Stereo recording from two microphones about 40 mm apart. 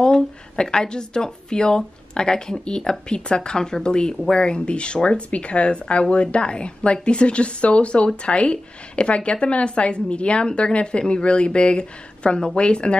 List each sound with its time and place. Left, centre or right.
0.0 s a woman's voice: centre